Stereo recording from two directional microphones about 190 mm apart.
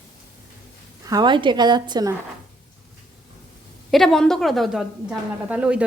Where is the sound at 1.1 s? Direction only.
20° right (ahead or behind).